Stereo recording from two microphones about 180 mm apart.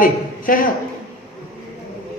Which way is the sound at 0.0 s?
50° left (ahead or behind).